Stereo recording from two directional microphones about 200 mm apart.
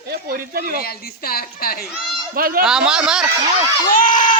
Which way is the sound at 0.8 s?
50° left (ahead or behind).